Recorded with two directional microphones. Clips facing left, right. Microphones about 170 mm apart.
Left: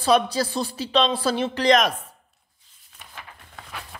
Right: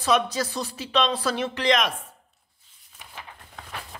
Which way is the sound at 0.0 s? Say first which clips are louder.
Left 3 dB; 30° left (ahead or behind).